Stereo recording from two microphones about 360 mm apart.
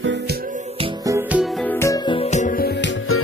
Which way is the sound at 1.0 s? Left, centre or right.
Centre.